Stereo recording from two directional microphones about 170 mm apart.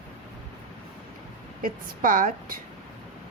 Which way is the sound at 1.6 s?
55° right (ahead or behind).